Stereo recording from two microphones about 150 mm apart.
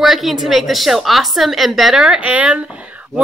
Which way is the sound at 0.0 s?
Centre (ahead or behind).